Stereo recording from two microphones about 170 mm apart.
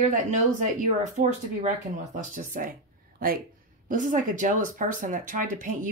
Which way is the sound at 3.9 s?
50° right (ahead or behind).